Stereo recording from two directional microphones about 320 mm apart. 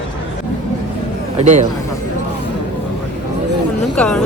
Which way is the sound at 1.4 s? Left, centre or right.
Right.